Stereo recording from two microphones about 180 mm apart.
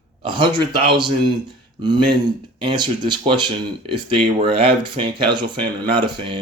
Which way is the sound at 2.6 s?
25° right (ahead or behind).